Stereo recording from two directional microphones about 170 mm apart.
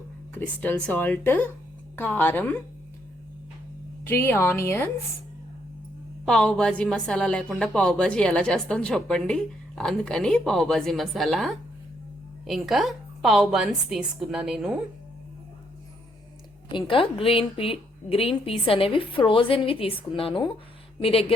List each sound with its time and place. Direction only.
0.3 s speech: 10° left (ahead or behind)
4.0 s speech: 10° left (ahead or behind)
6.2 s a woman's voice: 5° left (ahead or behind)
16.6 s a woman's voice: 30° left (ahead or behind)